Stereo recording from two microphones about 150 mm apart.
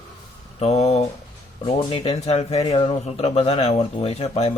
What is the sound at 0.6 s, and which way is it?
Speech, 45° left (ahead or behind).